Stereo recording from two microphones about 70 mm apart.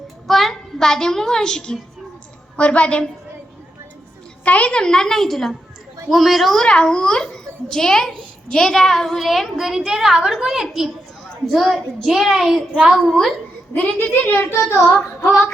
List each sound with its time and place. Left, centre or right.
0.3 s a child's voice: centre
4.4 s a woman's voice: centre
12.7 s a woman's voice: centre
13.7 s a woman's voice: left
15.2 s a sound: left